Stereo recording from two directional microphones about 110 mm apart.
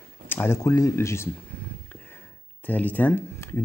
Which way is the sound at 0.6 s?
30° left (ahead or behind).